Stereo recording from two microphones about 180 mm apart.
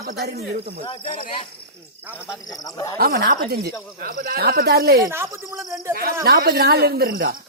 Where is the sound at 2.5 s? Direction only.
20° left (ahead or behind).